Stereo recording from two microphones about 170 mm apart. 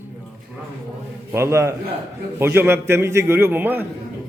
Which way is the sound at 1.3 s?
15° right (ahead or behind).